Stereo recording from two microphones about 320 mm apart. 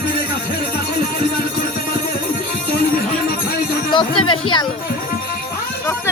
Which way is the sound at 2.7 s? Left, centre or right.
Left.